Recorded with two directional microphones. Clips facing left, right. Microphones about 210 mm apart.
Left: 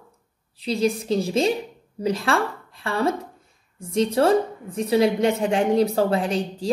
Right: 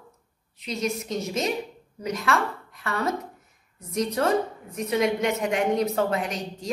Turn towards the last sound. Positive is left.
turn(degrees=30)  # may be behind; listen again after turning